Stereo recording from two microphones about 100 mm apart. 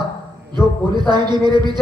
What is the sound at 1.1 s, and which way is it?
Speech, 45° right (ahead or behind).